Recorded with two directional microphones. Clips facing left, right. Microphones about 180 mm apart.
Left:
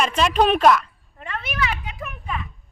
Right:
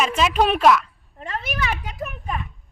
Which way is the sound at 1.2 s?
40° right (ahead or behind).